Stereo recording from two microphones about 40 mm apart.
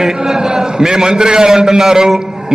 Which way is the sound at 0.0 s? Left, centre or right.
Centre.